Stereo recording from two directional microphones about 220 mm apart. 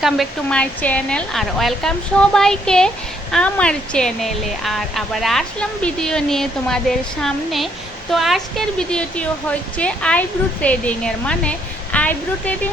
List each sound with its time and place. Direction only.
0.0 s a woman's voice: centre (ahead or behind)